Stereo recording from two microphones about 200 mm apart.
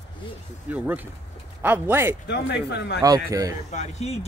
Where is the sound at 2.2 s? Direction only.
60° left (ahead or behind).